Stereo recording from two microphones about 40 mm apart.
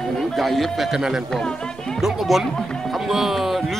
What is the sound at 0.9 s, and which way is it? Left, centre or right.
A man's voice, centre.